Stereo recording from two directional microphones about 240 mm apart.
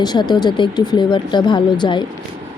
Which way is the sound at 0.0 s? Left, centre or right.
Centre.